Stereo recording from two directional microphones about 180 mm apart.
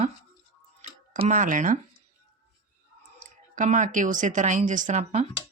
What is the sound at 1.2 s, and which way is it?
Speech, 45° right (ahead or behind).